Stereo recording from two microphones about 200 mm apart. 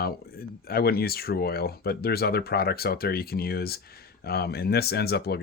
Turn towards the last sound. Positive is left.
turn(degrees=55)  # may be behind; listen again after turning